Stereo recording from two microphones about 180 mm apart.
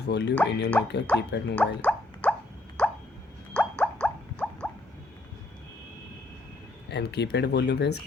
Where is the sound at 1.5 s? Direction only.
10° left (ahead or behind).